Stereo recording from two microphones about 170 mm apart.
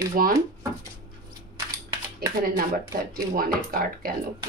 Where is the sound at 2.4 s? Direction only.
55° right (ahead or behind).